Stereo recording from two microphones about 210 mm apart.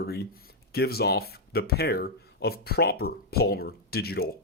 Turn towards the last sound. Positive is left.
turn(degrees=50)  # may be behind; listen again after turning